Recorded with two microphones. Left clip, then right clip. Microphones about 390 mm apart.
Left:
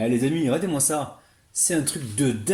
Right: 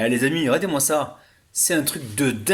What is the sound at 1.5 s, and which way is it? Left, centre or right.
Speech, centre.